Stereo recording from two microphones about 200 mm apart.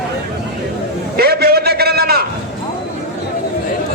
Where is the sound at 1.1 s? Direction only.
50° right (ahead or behind).